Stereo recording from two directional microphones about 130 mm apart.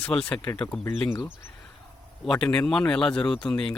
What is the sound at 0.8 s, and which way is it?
Speech, 20° left (ahead or behind).